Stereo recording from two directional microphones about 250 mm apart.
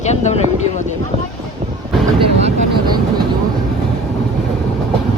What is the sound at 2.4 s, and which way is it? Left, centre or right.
Speech, centre.